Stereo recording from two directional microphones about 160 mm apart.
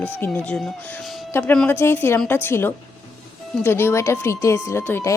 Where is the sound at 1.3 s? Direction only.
15° left (ahead or behind).